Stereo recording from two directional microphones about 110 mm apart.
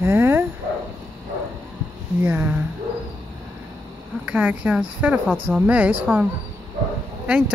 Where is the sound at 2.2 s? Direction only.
20° right (ahead or behind).